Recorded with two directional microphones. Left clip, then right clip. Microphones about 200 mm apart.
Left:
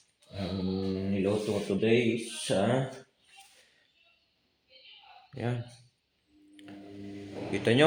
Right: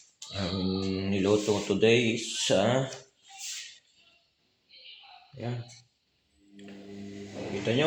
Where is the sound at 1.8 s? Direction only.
Centre (ahead or behind).